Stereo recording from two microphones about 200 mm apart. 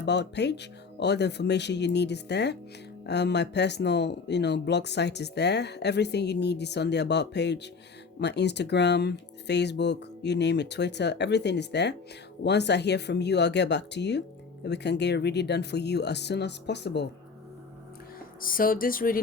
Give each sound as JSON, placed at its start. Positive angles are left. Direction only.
{"t": 0.0, "sound": "speech", "side_deg": 60}
{"t": 18.3, "sound": "speech", "side_deg": 45}